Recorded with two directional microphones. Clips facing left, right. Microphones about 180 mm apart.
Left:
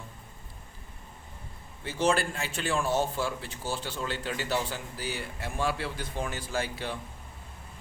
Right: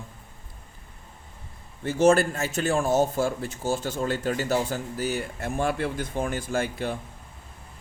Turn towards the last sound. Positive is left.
turn(degrees=-45)  # may be behind; listen again after turning